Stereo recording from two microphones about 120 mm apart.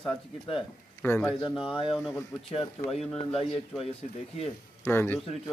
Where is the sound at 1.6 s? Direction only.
45° left (ahead or behind).